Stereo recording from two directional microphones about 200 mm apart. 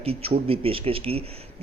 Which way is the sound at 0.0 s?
30° right (ahead or behind).